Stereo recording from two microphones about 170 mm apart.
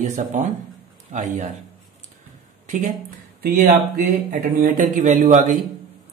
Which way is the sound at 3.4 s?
55° right (ahead or behind).